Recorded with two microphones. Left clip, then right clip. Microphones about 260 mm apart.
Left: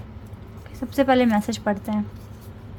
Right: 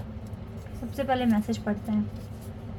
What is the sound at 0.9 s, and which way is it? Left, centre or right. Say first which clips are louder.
Speech: left 8 dB; left.